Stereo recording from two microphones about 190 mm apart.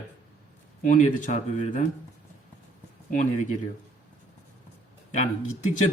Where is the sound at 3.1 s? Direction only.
40° left (ahead or behind).